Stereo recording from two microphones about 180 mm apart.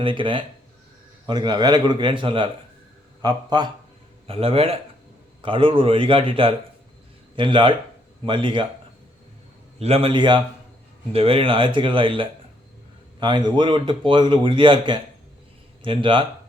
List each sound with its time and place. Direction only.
0.0 s a man's voice: 30° right (ahead or behind)
9.7 s a man's voice: 35° right (ahead or behind)